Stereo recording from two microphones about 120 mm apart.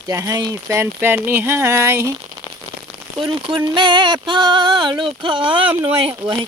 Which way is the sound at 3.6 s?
40° right (ahead or behind).